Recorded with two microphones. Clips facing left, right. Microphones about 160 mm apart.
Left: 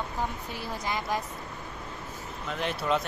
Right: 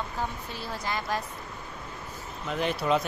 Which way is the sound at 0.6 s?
15° left (ahead or behind).